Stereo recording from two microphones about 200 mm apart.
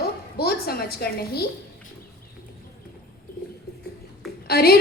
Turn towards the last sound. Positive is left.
turn(degrees=50)  # may be behind; listen again after turning